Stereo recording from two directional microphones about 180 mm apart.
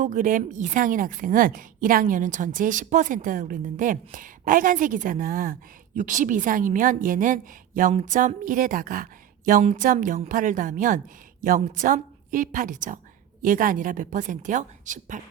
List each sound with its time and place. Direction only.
0.0 s a woman's voice: 45° right (ahead or behind)